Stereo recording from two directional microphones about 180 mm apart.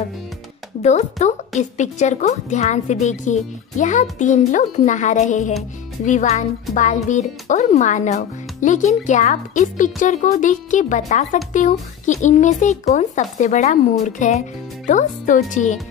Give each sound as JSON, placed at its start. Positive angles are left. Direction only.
{"t": 1.2, "sound": "a woman's voice", "side_deg": 40}